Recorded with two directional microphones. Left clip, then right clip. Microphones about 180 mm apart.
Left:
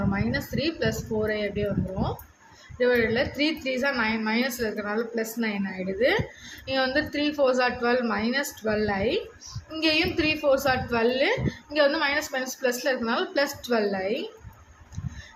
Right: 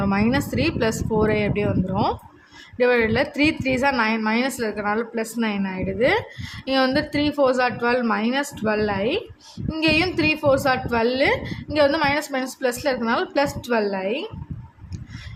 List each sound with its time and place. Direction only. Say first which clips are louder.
0.1 s a woman's voice: right 7 dB; 45° right (ahead or behind)